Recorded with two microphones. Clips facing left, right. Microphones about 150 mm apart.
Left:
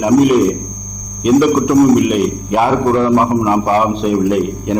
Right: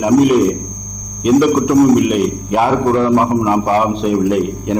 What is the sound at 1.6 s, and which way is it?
A man's voice, 15° left (ahead or behind).